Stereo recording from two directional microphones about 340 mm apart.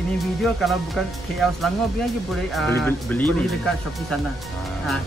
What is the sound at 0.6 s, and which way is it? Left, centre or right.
Speech, centre.